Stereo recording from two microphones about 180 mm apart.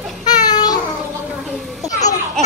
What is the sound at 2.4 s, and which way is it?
Laughter, 5° left (ahead or behind).